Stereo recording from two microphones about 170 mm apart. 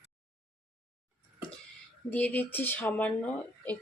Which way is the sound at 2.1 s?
10° left (ahead or behind).